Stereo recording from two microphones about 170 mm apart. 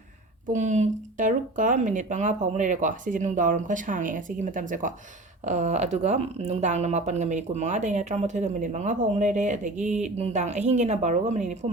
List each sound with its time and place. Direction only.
0.4 s speech: 45° right (ahead or behind)